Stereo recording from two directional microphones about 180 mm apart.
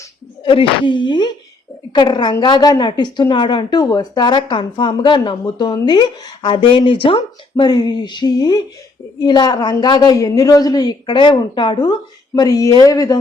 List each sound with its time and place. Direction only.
0.4 s a woman's voice: 30° left (ahead or behind)